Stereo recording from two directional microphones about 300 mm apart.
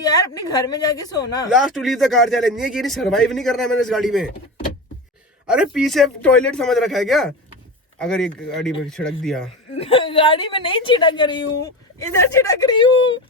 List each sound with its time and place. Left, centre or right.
0.0 s a woman's voice: centre
1.5 s speech: centre
5.5 s speech: centre
9.7 s a woman's voice: centre